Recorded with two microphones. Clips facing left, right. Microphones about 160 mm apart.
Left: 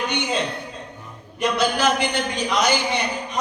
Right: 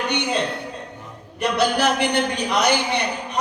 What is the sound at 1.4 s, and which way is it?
A man's voice, 60° right (ahead or behind).